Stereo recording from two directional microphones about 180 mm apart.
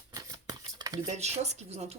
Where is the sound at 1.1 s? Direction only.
35° right (ahead or behind).